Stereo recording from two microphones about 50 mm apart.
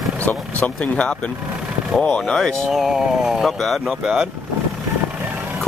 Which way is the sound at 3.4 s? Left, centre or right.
Centre.